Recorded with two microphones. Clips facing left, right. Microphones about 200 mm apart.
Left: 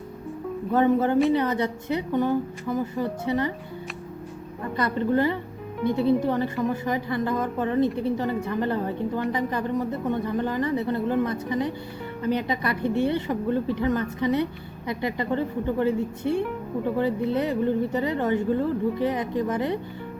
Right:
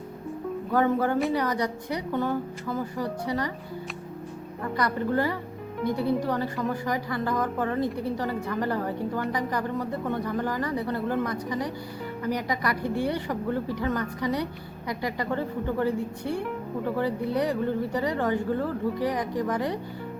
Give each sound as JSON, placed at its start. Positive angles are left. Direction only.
{"t": 0.7, "sound": "speech", "side_deg": 20}
{"t": 4.8, "sound": "speech", "side_deg": 20}